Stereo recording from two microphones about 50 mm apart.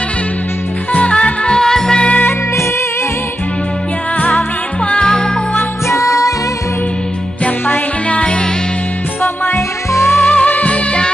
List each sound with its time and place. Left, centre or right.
0.9 s music: left
1.6 s music: centre
4.2 s music: left
4.9 s music: centre
5.9 s music: left
8.1 s music: left
9.9 s music: left
10.2 s music: left